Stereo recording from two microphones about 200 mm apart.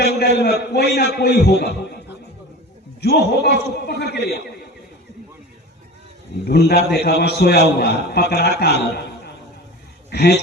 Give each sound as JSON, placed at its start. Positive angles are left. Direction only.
{"t": 0.0, "sound": "a sound", "side_deg": 55}
{"t": 0.7, "sound": "a man's voice", "side_deg": 55}
{"t": 3.0, "sound": "a man's voice", "side_deg": 55}
{"t": 6.4, "sound": "a man's voice", "side_deg": 55}